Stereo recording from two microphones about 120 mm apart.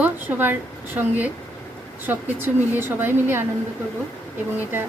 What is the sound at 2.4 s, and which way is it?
A woman's voice, 15° right (ahead or behind).